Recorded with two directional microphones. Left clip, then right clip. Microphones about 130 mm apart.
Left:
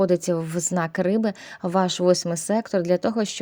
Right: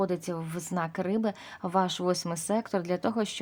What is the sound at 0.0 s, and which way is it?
A woman's voice, 40° left (ahead or behind).